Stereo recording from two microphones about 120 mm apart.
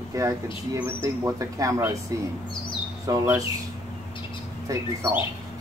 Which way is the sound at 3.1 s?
30° right (ahead or behind).